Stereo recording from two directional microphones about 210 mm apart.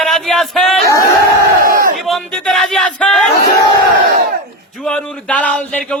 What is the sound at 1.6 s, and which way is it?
Battle cry, 40° right (ahead or behind).